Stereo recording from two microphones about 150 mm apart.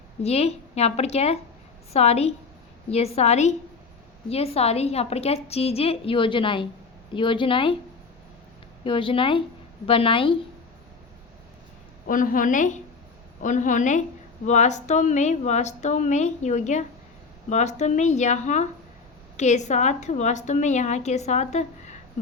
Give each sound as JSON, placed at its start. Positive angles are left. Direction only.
{"t": 0.2, "sound": "a woman's voice", "side_deg": 45}
{"t": 8.8, "sound": "speech", "side_deg": 35}
{"t": 12.0, "sound": "a woman's voice", "side_deg": 65}